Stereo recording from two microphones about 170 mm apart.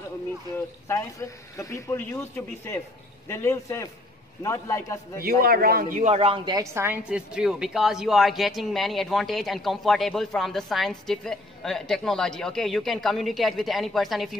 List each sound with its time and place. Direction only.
0.8 s a man's voice: 15° left (ahead or behind)
5.4 s a woman's voice: 60° right (ahead or behind); by 14.3 s centre (ahead or behind)